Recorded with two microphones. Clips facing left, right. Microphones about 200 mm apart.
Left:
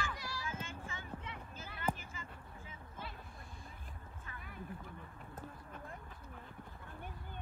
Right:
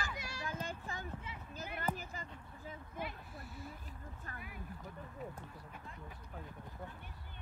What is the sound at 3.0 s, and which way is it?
Vehicle, 15° right (ahead or behind).